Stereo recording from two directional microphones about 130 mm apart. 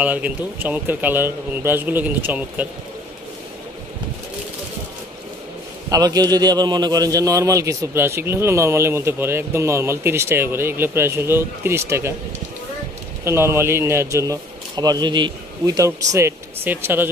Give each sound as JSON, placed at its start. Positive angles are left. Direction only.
{"t": 0.0, "sound": "speech", "side_deg": -10}
{"t": 5.9, "sound": "a man's voice", "side_deg": -30}
{"t": 13.2, "sound": "a man's voice", "side_deg": -20}